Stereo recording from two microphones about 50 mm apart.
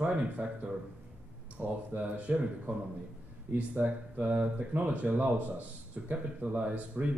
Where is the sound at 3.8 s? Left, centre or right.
Right.